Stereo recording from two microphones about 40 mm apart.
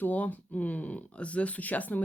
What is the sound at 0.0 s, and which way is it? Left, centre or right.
Speech, left.